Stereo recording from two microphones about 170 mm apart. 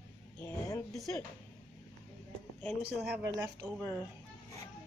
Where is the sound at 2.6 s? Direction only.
15° left (ahead or behind).